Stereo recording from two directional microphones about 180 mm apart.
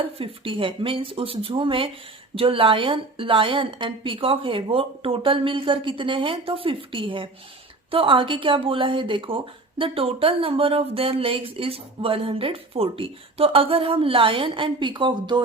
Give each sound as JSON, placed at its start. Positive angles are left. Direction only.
{"t": 0.0, "sound": "a woman's voice", "side_deg": -30}